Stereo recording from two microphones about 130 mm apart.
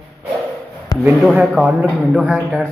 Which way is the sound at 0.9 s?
25° left (ahead or behind).